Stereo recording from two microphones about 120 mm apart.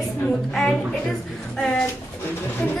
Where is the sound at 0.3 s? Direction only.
5° left (ahead or behind).